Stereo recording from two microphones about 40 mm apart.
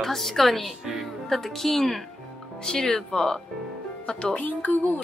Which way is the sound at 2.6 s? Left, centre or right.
Centre.